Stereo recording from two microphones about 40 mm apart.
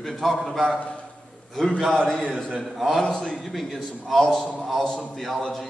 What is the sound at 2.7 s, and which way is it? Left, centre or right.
Speech, centre.